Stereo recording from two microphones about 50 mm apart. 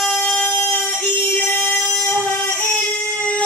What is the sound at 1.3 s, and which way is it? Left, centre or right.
Music, left.